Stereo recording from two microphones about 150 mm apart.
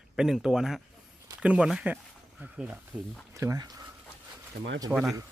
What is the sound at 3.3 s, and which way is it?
Speech, 20° right (ahead or behind).